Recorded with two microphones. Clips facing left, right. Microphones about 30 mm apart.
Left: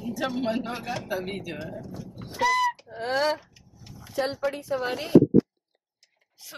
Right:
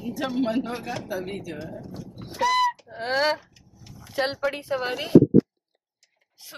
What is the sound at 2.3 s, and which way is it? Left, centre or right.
Honk, centre.